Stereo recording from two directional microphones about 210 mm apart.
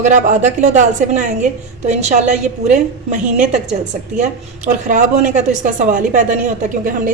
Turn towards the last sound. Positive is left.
turn(degrees=-40)  # may be behind; listen again after turning